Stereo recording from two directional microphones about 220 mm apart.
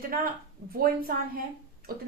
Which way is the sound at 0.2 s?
40° right (ahead or behind).